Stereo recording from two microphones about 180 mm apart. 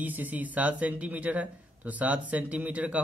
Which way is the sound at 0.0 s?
10° right (ahead or behind).